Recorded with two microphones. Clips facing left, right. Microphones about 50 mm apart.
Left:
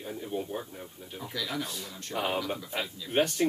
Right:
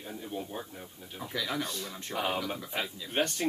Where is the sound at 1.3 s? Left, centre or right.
Centre.